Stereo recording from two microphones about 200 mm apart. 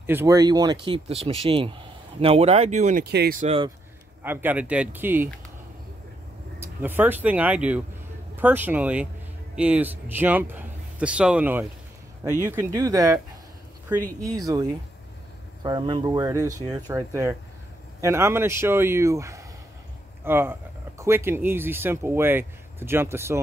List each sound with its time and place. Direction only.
0.0 s speech: 10° right (ahead or behind); by 3.0 s 35° right (ahead or behind)
3.0 s speech: 55° right (ahead or behind)
3.4 s speech: 25° right (ahead or behind)
4.2 s speech: 10° right (ahead or behind)
6.6 s speech: 10° right (ahead or behind)
14.2 s speech: 15° right (ahead or behind)